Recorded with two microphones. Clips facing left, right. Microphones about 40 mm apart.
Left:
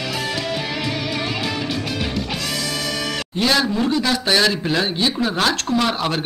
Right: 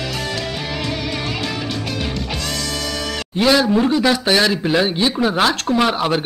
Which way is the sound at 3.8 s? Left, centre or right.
Centre.